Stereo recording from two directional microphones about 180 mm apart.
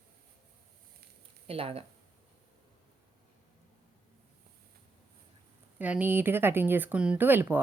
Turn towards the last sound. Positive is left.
turn(degrees=-10)  # may be behind; listen again after turning